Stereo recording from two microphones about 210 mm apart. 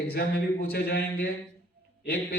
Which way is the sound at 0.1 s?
45° left (ahead or behind).